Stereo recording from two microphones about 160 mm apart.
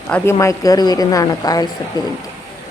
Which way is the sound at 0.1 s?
15° left (ahead or behind).